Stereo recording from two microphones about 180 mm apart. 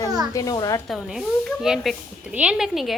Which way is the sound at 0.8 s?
Centre (ahead or behind).